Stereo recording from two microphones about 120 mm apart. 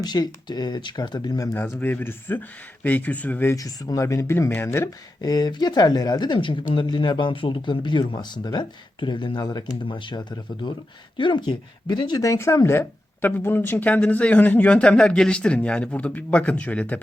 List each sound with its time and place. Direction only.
0.0 s speech: 35° left (ahead or behind)
1.5 s a man's voice: 15° left (ahead or behind)
3.5 s speech: 30° left (ahead or behind)
5.2 s speech: 35° left (ahead or behind)
9.8 s a man's voice: 45° left (ahead or behind); by 17.0 s 10° left (ahead or behind)